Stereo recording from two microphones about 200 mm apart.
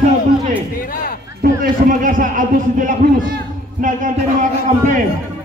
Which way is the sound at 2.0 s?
40° right (ahead or behind).